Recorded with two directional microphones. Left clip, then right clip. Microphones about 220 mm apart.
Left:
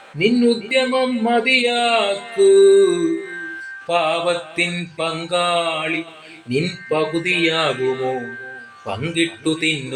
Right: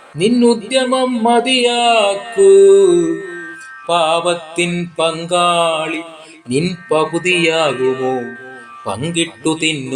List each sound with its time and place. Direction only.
0.2 s speech: 30° right (ahead or behind)
8.9 s speech: 30° right (ahead or behind)